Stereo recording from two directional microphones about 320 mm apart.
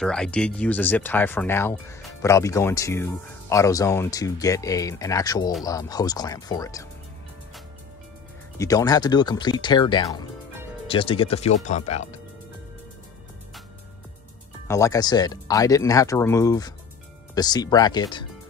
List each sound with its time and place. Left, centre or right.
0.0 s speech: centre
8.5 s speech: centre
14.7 s speech: centre